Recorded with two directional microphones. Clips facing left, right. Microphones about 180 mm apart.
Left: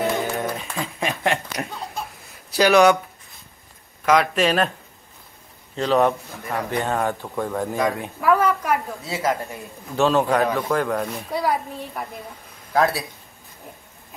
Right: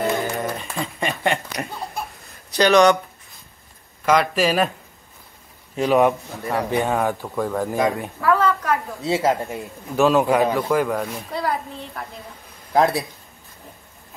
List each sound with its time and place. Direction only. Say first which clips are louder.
0.0 s a sound: even; centre (ahead or behind)
2.5 s speech: even; 5° left (ahead or behind)
4.0 s speech: even; centre (ahead or behind)
5.8 s speech: right 2 dB; 15° right (ahead or behind)
8.2 s a sound: left 1 dB; 15° left (ahead or behind)
9.0 s speech: right 4 dB; 25° right (ahead or behind)
9.9 s speech: right 2 dB; 5° right (ahead or behind)
12.7 s speech: right 2 dB; 20° right (ahead or behind)